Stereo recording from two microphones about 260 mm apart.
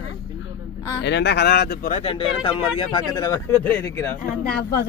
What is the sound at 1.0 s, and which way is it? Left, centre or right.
Speech, left.